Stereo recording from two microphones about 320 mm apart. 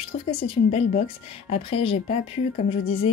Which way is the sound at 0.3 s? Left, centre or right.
Centre.